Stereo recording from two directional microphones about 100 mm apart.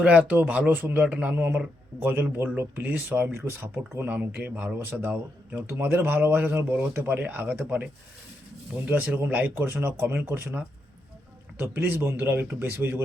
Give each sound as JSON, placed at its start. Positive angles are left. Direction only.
{"t": 0.0, "sound": "speech", "side_deg": -10}
{"t": 8.9, "sound": "speech", "side_deg": -15}